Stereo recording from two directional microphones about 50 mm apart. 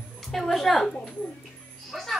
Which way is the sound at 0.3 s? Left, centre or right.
Centre.